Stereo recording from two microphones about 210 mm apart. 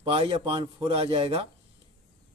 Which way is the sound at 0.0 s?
25° right (ahead or behind).